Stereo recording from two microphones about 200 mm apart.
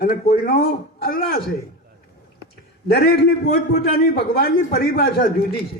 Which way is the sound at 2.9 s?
50° left (ahead or behind).